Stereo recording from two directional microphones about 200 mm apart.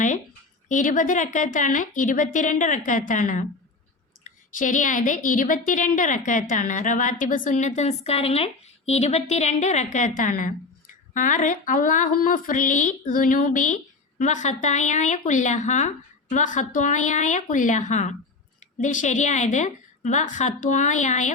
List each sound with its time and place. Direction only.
0.7 s a woman's voice: 40° left (ahead or behind)